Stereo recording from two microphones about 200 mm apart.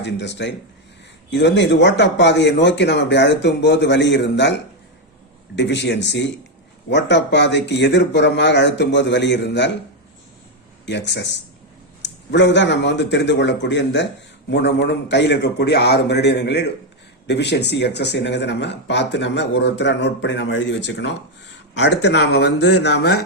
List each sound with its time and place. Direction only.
0.0 s speech: 60° left (ahead or behind)
5.6 s speech: 60° left (ahead or behind)
10.9 s speech: 60° left (ahead or behind)